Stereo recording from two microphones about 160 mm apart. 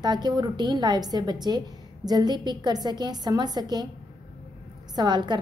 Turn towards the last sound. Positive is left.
turn(degrees=-30)  # may be behind; listen again after turning